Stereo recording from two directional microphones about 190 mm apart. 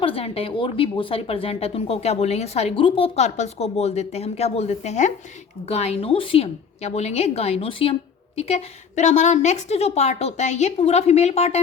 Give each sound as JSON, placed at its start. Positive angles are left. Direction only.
{"t": 0.0, "sound": "a woman's voice", "side_deg": 30}